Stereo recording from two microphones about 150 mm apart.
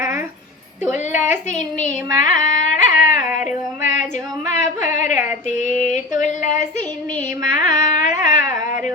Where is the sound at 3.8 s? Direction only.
55° left (ahead or behind).